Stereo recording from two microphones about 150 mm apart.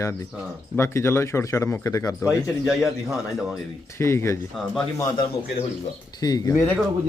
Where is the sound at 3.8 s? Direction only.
20° left (ahead or behind).